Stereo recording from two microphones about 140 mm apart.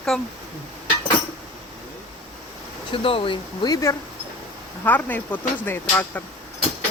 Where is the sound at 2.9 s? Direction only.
40° left (ahead or behind).